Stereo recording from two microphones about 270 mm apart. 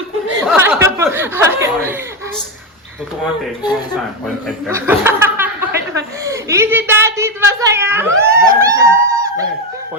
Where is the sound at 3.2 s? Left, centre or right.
Centre.